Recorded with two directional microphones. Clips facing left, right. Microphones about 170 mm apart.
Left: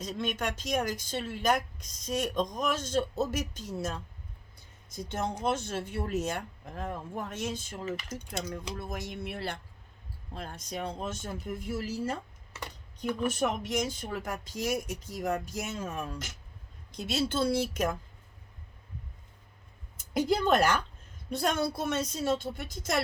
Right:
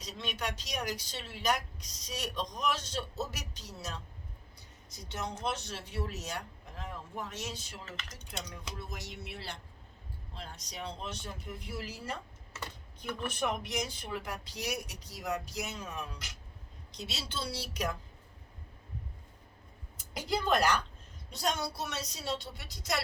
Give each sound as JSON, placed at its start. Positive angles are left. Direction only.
{"t": 0.0, "sound": "speech", "side_deg": 50}
{"t": 7.9, "sound": "speech", "side_deg": 10}
{"t": 8.3, "sound": "speech", "side_deg": 50}
{"t": 13.3, "sound": "speech", "side_deg": 45}
{"t": 20.0, "sound": "speech", "side_deg": 50}